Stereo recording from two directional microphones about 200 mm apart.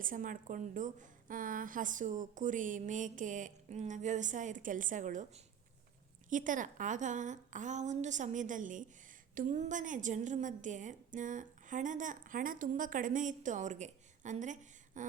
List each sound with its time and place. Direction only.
0.0 s a woman's voice: 40° right (ahead or behind)